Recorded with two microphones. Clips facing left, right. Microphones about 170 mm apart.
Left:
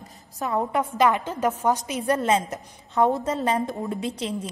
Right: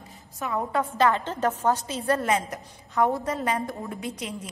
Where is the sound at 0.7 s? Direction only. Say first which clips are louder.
Even; 15° left (ahead or behind).